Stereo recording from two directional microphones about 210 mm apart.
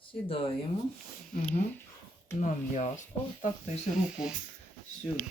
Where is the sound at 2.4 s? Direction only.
35° left (ahead or behind).